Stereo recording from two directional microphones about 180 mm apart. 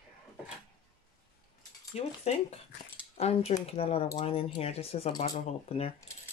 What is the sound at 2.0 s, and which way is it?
Speech, 35° left (ahead or behind).